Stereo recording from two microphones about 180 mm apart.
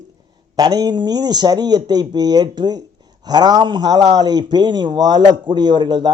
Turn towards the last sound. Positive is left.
turn(degrees=-25)  # may be behind; listen again after turning